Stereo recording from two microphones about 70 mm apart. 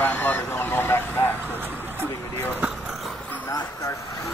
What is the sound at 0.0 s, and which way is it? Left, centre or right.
Vehicle, left.